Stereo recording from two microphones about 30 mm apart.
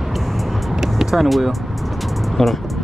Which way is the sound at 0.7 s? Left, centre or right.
Centre.